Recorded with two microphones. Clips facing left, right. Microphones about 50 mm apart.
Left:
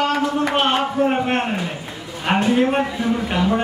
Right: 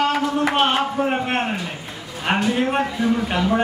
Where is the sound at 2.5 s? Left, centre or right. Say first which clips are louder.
Left 2 dB; centre.